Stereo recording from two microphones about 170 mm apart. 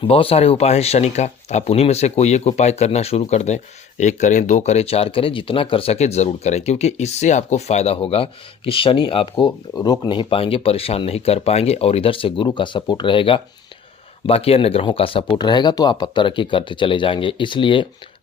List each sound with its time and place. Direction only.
0.0 s speech: 35° left (ahead or behind)